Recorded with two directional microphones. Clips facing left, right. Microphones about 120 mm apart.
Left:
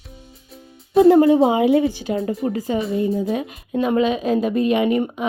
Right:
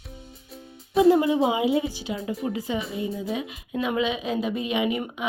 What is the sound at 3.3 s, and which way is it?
Speech, 50° left (ahead or behind).